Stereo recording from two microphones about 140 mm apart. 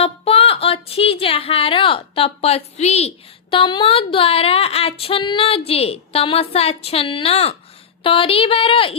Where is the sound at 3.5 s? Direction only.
40° left (ahead or behind).